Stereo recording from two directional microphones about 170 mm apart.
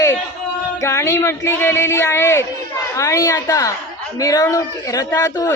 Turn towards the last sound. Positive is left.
turn(degrees=20)  # may be behind; listen again after turning